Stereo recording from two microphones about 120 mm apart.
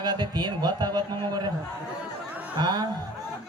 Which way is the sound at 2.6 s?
35° right (ahead or behind).